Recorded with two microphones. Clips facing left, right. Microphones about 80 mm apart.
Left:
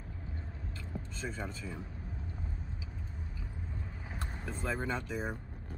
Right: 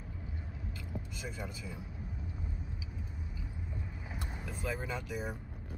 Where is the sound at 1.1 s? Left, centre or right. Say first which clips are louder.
Left 3 dB; centre.